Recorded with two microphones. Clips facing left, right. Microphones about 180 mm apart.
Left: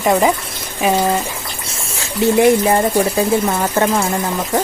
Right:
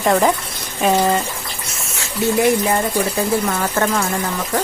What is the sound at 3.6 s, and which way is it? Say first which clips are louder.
Speech: left 3 dB; 20° left (ahead or behind).